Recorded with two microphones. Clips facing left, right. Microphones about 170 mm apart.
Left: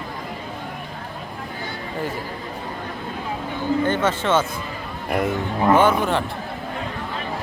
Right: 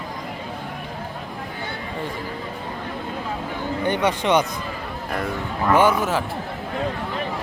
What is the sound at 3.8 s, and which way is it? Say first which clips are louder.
Speech: right 4 dB; 15° right (ahead or behind).